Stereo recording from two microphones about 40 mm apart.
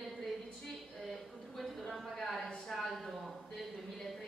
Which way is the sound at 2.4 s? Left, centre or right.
Centre.